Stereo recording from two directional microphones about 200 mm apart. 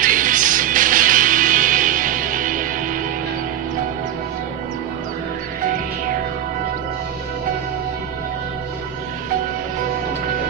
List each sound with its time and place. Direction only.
0.0 s music: 40° right (ahead or behind)